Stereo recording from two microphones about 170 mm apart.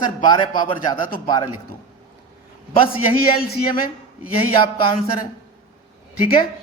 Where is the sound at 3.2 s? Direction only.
60° left (ahead or behind).